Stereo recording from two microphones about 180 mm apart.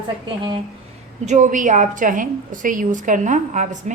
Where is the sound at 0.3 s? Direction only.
30° right (ahead or behind).